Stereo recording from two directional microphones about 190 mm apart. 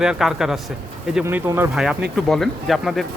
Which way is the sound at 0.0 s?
5° right (ahead or behind).